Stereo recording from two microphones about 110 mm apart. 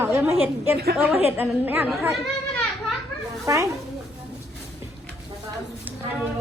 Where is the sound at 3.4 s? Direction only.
30° right (ahead or behind).